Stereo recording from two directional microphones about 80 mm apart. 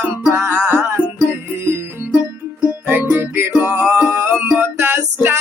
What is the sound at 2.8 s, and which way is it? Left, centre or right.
Music, right.